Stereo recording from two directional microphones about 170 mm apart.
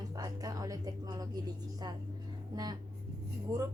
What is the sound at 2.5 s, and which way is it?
Speech, 25° right (ahead or behind).